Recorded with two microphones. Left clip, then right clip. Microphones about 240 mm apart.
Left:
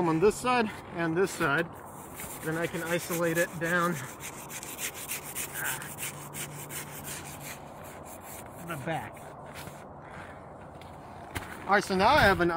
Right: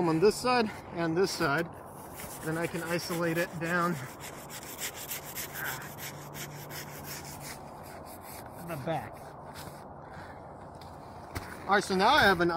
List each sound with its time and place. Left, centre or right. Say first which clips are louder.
0.0 s speech: even; centre
2.4 s rub: left 2 dB; centre
11.3 s speech: left 1 dB; centre